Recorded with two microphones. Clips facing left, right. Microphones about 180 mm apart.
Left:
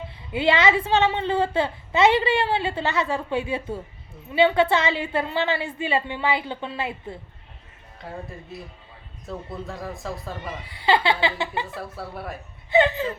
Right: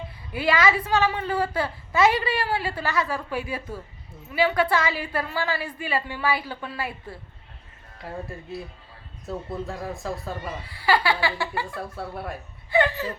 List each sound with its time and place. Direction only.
0.3 s a woman's voice: 25° left (ahead or behind)
7.9 s speech: centre (ahead or behind)
10.3 s a woman's voice: 20° left (ahead or behind)
11.8 s speech: centre (ahead or behind)
12.7 s a woman's voice: 20° left (ahead or behind)